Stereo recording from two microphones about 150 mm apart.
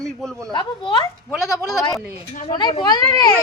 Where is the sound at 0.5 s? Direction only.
30° left (ahead or behind).